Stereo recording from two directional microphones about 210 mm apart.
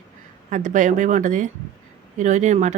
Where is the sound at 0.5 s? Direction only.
35° right (ahead or behind).